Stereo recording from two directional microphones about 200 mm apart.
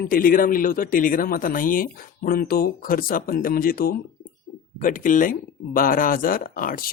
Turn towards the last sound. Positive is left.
turn(degrees=45)  # may be behind; listen again after turning